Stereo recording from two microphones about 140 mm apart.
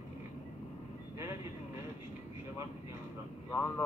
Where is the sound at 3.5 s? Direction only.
20° left (ahead or behind).